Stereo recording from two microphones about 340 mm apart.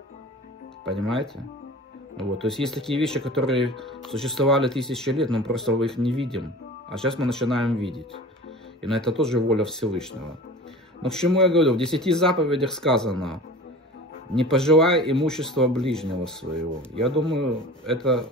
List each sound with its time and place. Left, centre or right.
0.8 s speech: centre
8.8 s speech: centre